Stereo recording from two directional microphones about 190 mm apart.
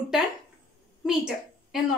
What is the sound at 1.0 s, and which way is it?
Speech, 5° right (ahead or behind).